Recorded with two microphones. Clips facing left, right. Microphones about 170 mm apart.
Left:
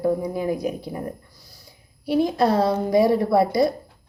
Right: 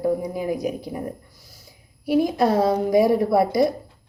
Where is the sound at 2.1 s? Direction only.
5° right (ahead or behind).